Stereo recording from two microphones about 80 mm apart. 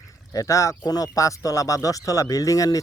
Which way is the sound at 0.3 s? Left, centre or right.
Left.